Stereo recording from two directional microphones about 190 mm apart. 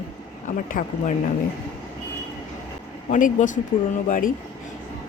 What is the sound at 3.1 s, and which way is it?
A woman's voice, 40° left (ahead or behind).